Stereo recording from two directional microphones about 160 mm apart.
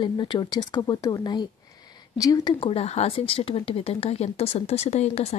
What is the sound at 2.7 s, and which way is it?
Speech, 40° left (ahead or behind).